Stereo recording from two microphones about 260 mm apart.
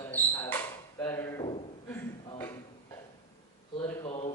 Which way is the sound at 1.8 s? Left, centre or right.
Centre.